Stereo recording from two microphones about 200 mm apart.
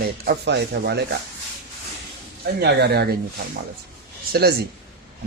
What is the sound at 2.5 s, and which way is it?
Speech, 55° right (ahead or behind).